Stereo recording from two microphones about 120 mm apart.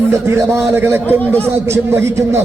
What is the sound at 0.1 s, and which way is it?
A man's voice, 25° right (ahead or behind).